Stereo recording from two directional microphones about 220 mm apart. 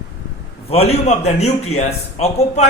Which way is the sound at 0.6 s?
25° left (ahead or behind).